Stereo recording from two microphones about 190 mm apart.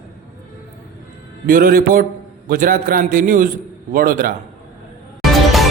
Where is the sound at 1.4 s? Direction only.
50° right (ahead or behind).